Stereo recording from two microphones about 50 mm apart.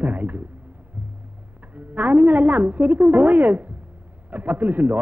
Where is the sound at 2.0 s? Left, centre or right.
Right.